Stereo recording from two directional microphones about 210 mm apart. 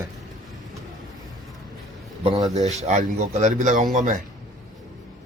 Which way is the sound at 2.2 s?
20° right (ahead or behind).